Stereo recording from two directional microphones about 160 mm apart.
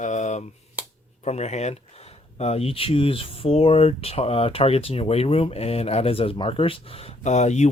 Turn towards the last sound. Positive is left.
turn(degrees=45)  # may be behind; listen again after turning